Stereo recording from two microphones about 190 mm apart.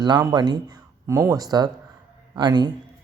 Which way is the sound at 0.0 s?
20° right (ahead or behind).